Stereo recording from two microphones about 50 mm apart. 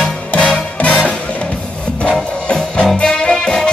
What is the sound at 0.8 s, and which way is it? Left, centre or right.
Music, centre.